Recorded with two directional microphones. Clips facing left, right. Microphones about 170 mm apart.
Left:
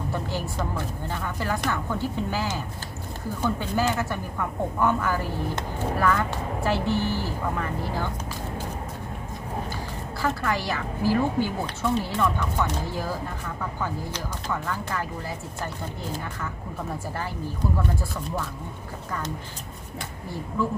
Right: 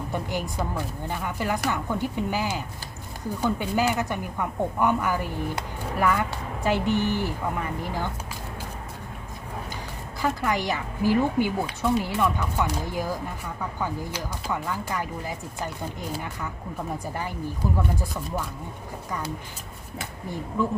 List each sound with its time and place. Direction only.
0.1 s speech: 15° right (ahead or behind)
10.2 s speech: 15° right (ahead or behind)
17.2 s speech: 15° right (ahead or behind)